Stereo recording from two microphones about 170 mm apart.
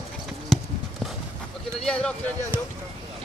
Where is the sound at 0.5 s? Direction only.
Centre (ahead or behind).